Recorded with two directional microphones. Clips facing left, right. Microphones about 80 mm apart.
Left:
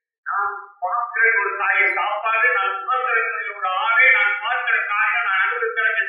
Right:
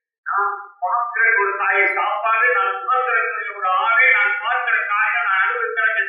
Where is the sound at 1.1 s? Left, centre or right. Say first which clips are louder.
Right 2 dB; centre.